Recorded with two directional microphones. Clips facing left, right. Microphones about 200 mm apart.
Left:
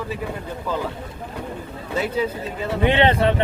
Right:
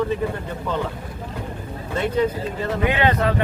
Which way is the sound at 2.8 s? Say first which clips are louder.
Left 3 dB; 30° left (ahead or behind).